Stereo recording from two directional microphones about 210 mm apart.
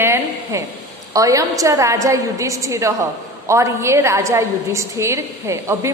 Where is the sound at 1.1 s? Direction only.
15° right (ahead or behind).